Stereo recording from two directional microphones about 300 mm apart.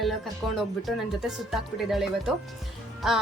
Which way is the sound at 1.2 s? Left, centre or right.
Centre.